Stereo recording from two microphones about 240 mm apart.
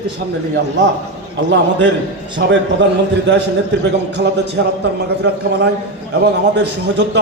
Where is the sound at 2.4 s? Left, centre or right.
Right.